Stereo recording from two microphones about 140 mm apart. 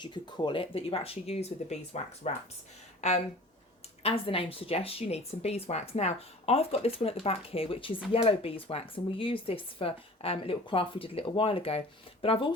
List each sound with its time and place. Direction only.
0.0 s speech: 35° left (ahead or behind); by 2.3 s 50° left (ahead or behind)
4.0 s speech: 40° left (ahead or behind)